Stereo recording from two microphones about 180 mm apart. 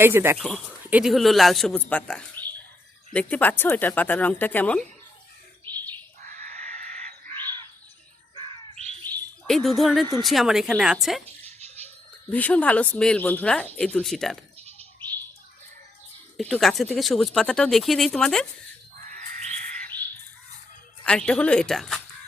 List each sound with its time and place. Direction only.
0.0 s speech: 10° right (ahead or behind)
0.3 s speech: centre (ahead or behind)
6.2 s screaming: 45° right (ahead or behind)
9.0 s bird: centre (ahead or behind)
10.2 s speech: centre (ahead or behind)
12.3 s speech: 10° left (ahead or behind)
16.4 s speech: 5° left (ahead or behind)
18.9 s bird: 50° right (ahead or behind)
21.0 s speech: 5° left (ahead or behind)